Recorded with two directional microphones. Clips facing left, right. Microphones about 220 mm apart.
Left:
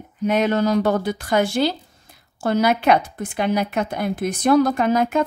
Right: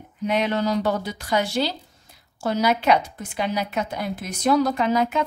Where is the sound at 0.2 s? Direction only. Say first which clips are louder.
Left 4 dB; 45° left (ahead or behind).